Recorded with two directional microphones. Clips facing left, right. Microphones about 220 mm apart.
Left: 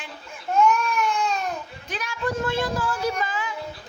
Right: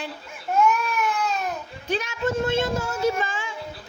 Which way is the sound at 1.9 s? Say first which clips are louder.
Right 4 dB; 25° right (ahead or behind).